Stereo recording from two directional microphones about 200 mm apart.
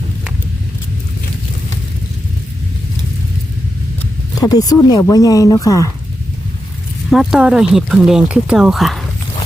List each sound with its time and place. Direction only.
4.4 s speech: 20° left (ahead or behind)
7.1 s speech: centre (ahead or behind)